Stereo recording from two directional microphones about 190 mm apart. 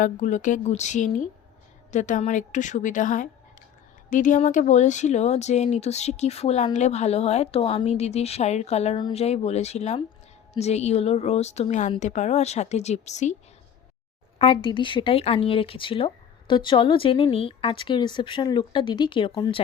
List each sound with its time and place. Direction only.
0.0 s speech: 40° left (ahead or behind)
14.3 s speech: 30° left (ahead or behind)